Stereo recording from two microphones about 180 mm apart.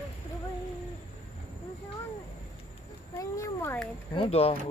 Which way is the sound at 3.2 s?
20° left (ahead or behind).